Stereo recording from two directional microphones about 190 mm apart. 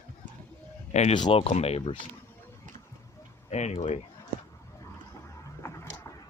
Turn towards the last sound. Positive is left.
turn(degrees=15)  # may be behind; listen again after turning